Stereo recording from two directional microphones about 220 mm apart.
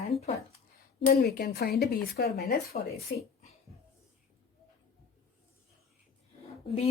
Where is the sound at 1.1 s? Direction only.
45° left (ahead or behind).